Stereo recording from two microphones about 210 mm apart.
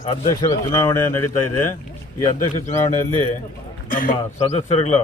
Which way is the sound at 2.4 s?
35° left (ahead or behind).